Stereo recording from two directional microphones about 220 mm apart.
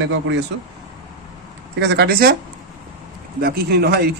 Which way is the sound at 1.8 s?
50° right (ahead or behind).